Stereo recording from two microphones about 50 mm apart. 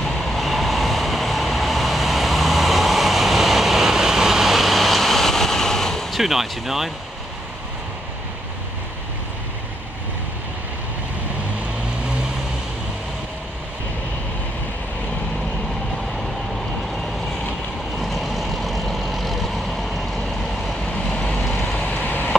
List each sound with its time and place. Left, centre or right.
0.0 s vehicle: centre
6.2 s speech: centre
18.0 s vehicle: centre
20.6 s vehicle: centre
21.8 s a sound: left